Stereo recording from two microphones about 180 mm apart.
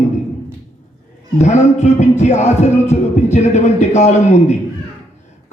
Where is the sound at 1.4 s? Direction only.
40° left (ahead or behind).